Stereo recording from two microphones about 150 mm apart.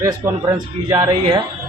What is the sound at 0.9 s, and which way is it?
Speech, 25° right (ahead or behind).